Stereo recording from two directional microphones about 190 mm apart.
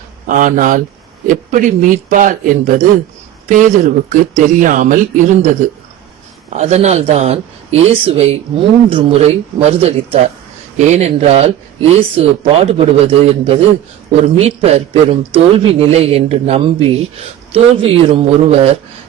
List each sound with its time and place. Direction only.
0.3 s speech: 45° right (ahead or behind)